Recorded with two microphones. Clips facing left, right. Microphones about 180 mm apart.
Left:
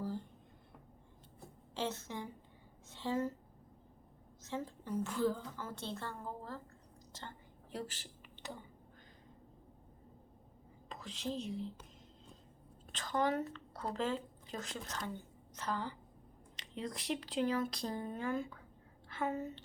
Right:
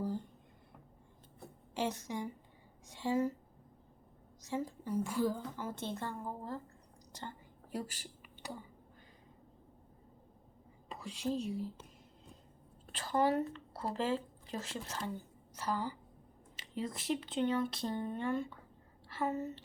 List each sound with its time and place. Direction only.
1.7 s a woman's voice: 15° right (ahead or behind)
4.4 s a woman's voice: 10° right (ahead or behind)
7.1 s whispering: 15° right (ahead or behind)
10.8 s a woman's voice: 10° right (ahead or behind)
13.1 s a woman's voice: 5° right (ahead or behind)